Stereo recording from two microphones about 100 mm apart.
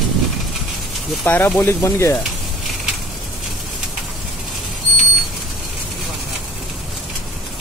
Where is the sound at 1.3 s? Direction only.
15° left (ahead or behind).